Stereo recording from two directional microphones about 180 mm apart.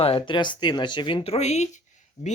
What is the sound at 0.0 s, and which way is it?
Speech, 30° left (ahead or behind).